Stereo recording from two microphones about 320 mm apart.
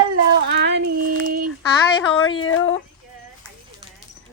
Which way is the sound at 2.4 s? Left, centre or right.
Left.